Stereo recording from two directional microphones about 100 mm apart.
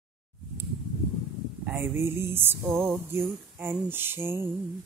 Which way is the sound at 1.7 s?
25° right (ahead or behind).